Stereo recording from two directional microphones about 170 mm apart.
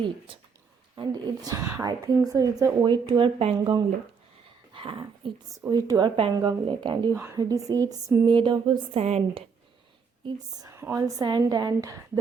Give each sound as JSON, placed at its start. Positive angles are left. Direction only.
{"t": 0.9, "sound": "a woman's voice", "side_deg": -25}
{"t": 4.7, "sound": "a sound", "side_deg": -30}
{"t": 5.5, "sound": "a woman's voice", "side_deg": -20}
{"t": 10.2, "sound": "a woman's voice", "side_deg": -20}